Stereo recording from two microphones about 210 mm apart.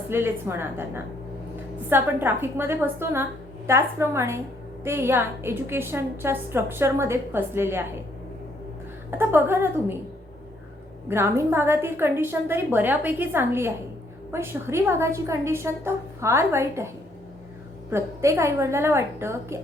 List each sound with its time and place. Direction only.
0.1 s a woman's voice: 10° right (ahead or behind)
9.0 s a woman's voice: 10° right (ahead or behind)
11.1 s a woman's voice: 10° right (ahead or behind)
17.9 s a woman's voice: 15° right (ahead or behind)